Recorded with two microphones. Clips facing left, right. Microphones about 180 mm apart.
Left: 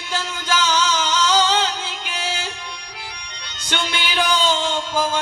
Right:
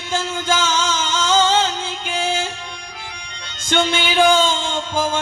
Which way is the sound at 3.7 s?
50° right (ahead or behind).